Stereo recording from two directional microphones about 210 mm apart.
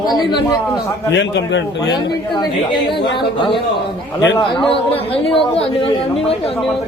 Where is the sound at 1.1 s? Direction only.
60° left (ahead or behind).